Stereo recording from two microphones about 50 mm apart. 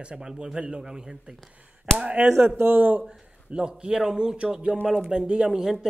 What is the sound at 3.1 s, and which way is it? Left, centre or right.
Speech, centre.